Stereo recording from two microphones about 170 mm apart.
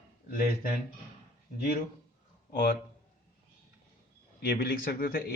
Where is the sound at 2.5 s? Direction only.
60° left (ahead or behind).